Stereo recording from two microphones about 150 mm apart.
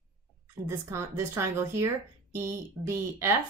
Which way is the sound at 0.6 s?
20° right (ahead or behind).